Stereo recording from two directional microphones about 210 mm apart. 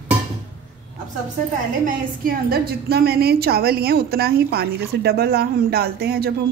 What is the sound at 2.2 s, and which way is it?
A woman's voice, 45° right (ahead or behind).